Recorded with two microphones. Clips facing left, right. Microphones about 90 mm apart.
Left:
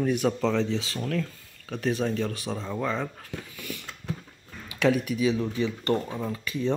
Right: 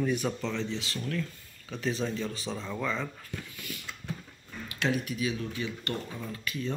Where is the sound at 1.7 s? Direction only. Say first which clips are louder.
Left 5 dB; 55° left (ahead or behind).